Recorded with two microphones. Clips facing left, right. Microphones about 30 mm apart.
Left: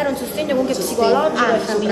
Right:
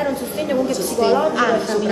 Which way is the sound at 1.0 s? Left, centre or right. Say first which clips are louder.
Left 1 dB; left.